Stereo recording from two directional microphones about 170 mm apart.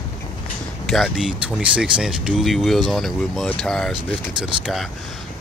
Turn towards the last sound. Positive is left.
turn(degrees=0)  # may be behind; listen again after turning